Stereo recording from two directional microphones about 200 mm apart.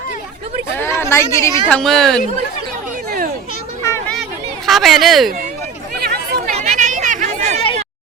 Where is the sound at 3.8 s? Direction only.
15° left (ahead or behind).